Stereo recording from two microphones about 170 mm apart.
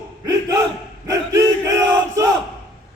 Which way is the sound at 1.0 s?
20° right (ahead or behind).